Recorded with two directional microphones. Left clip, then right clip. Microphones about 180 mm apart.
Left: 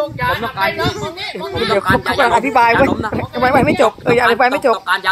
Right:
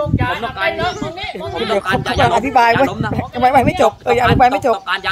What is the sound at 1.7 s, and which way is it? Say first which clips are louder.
Speech: left 3 dB; 5° right (ahead or behind).